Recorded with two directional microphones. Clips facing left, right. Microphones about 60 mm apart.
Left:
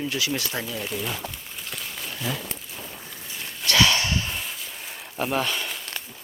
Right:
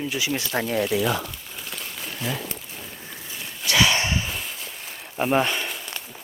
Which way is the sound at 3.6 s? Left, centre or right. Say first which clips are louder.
Even; centre.